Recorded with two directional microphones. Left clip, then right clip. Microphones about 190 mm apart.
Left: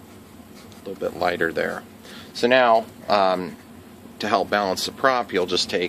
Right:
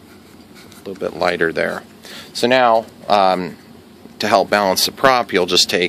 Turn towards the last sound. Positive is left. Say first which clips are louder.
# right 7 dB
turn(degrees=-50)  # may be behind; listen again after turning